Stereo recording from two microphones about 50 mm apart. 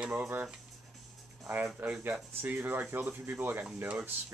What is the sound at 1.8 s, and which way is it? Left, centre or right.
Speech, right.